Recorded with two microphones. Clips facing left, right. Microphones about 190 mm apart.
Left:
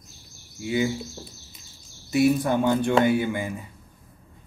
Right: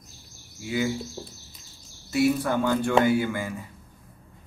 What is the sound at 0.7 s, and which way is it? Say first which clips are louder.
Speech: left 2 dB; 20° left (ahead or behind).